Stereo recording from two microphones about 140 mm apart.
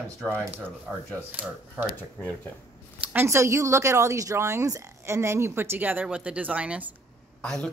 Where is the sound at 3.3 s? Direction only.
20° right (ahead or behind).